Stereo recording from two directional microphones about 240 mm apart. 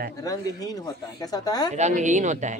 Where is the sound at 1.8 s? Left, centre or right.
Right.